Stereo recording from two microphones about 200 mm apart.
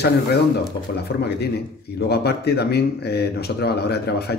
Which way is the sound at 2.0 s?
55° left (ahead or behind).